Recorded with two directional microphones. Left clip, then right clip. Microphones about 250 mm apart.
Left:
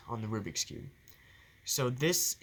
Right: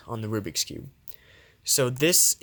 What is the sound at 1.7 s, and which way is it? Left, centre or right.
Speech, right.